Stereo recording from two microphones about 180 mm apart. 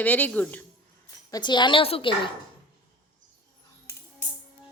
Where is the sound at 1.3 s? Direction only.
25° left (ahead or behind).